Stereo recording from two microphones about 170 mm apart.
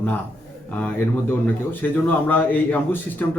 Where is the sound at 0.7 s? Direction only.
10° left (ahead or behind).